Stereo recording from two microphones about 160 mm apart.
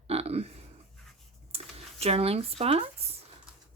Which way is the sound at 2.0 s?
40° right (ahead or behind).